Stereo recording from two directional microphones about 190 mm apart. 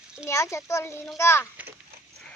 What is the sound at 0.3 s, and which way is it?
Speech, 15° left (ahead or behind).